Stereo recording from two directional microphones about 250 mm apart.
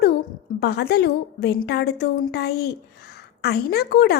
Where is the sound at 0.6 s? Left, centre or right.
Left.